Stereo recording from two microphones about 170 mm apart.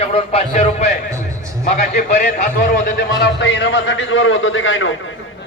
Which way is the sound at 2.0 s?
65° left (ahead or behind).